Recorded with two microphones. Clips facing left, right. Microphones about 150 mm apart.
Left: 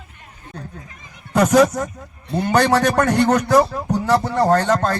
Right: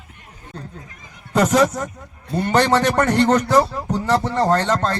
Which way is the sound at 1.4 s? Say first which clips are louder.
Left 2 dB; 10° left (ahead or behind).